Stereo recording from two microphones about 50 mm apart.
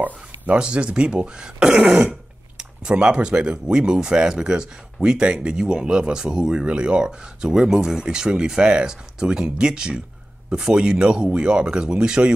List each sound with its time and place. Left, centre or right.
0.0 s speech: right